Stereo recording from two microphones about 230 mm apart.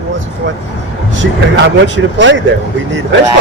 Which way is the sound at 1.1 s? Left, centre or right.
Right.